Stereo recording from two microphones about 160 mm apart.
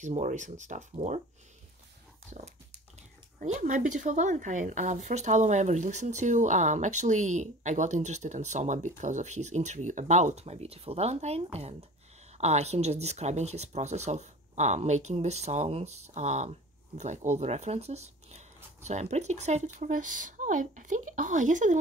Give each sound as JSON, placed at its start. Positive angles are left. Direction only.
{"t": 0.0, "sound": "speech", "side_deg": -50}
{"t": 3.3, "sound": "speech", "side_deg": -45}